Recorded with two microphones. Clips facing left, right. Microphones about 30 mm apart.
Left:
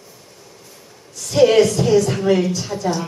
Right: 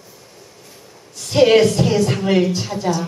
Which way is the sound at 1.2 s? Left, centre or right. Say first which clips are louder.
Right 1 dB; right.